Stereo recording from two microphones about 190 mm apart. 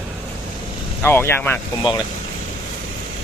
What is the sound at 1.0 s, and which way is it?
Speech, 10° left (ahead or behind).